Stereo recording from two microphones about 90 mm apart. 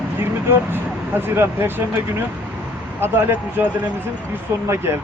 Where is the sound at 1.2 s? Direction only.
25° right (ahead or behind).